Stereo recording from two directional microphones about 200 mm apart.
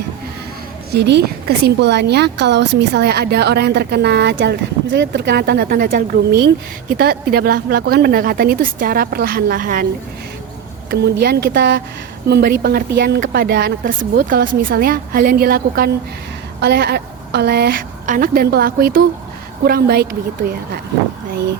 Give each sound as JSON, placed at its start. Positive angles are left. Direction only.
{"t": 0.9, "sound": "a woman's voice", "side_deg": -55}
{"t": 10.9, "sound": "a woman's voice", "side_deg": -55}